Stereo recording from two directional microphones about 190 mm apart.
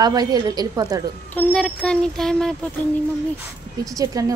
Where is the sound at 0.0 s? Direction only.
20° right (ahead or behind).